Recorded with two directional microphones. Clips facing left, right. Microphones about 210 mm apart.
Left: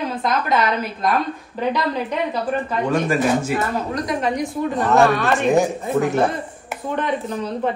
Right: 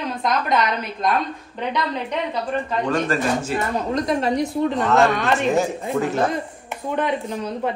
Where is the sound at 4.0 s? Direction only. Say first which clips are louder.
Right 2 dB; 30° right (ahead or behind).